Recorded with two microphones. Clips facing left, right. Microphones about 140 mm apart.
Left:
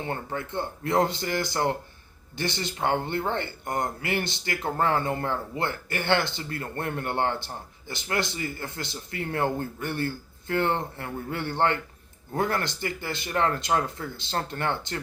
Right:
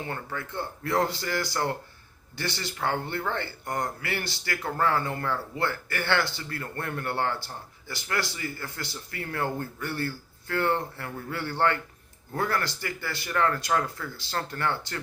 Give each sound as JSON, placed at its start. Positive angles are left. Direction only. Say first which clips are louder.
{"t": 0.0, "sound": "speech", "louder": "left 3 dB", "side_deg": 25}